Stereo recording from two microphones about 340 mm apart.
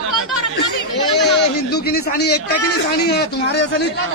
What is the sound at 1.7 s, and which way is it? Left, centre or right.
A man's voice, left.